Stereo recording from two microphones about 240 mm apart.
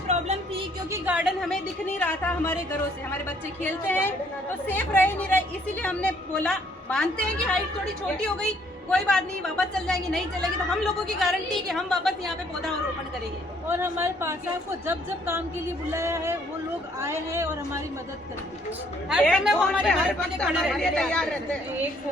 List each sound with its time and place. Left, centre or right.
0.1 s music: right
0.9 s a woman's voice: centre
13.7 s a woman's voice: centre
19.0 s a woman's voice: centre